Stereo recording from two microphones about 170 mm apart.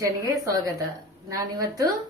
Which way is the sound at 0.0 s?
20° right (ahead or behind).